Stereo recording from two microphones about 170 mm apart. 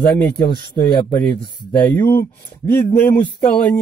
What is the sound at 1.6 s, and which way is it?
Speech, 15° left (ahead or behind).